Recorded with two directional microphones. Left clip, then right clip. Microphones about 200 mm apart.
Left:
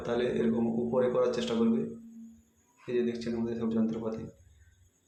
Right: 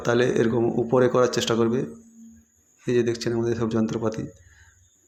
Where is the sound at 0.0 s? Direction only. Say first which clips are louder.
Right 9 dB; 40° right (ahead or behind).